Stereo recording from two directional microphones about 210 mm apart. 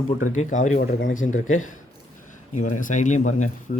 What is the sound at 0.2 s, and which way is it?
Speech, 35° left (ahead or behind).